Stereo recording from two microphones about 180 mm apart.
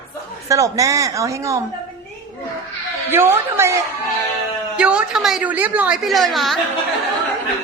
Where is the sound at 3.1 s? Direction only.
15° right (ahead or behind).